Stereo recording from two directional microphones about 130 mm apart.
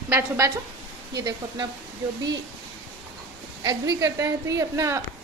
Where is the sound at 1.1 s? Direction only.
30° right (ahead or behind).